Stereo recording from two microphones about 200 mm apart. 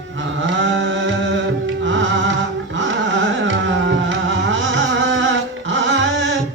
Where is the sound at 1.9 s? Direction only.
70° right (ahead or behind).